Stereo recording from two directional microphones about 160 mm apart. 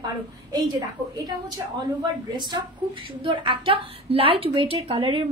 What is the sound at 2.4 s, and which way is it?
A woman's voice, 25° right (ahead or behind).